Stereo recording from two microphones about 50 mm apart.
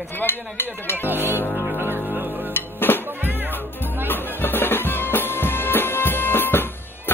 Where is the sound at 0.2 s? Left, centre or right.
Left.